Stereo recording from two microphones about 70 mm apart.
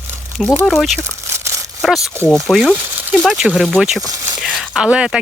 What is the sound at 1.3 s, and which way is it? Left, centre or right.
Crumpling, right.